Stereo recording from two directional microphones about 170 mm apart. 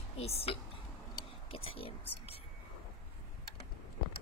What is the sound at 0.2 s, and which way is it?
A woman's voice, 35° left (ahead or behind).